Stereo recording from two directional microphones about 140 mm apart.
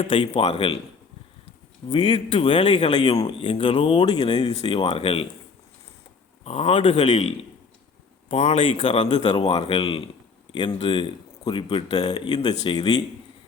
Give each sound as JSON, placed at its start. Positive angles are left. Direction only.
{"t": 0.0, "sound": "speech", "side_deg": 40}
{"t": 1.9, "sound": "speech", "side_deg": 30}
{"t": 4.4, "sound": "speech", "side_deg": 45}
{"t": 6.4, "sound": "speech", "side_deg": 50}
{"t": 9.4, "sound": "speech", "side_deg": 45}